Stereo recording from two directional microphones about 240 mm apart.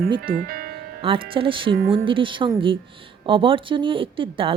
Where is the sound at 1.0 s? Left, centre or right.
Right.